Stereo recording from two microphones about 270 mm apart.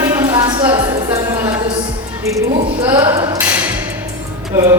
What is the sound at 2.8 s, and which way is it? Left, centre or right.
Speech, centre.